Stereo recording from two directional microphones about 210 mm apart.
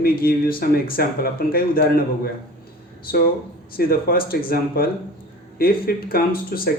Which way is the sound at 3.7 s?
45° left (ahead or behind).